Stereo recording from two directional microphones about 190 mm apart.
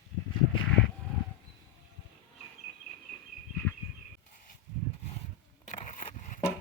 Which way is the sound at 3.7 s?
5° left (ahead or behind).